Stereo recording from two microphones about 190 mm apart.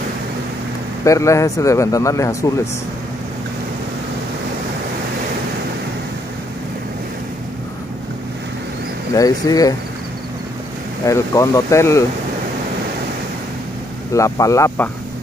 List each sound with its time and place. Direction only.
1.0 s speech: 15° left (ahead or behind)
9.1 s speech: 20° left (ahead or behind)
11.1 s speech: 15° left (ahead or behind)
14.1 s speech: 15° left (ahead or behind)